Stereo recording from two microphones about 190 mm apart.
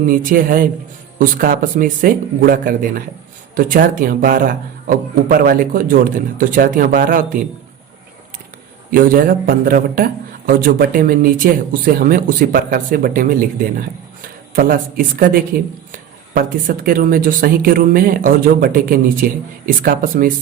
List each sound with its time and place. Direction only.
0.1 s a man's voice: 45° right (ahead or behind)
8.9 s a man's voice: 50° right (ahead or behind)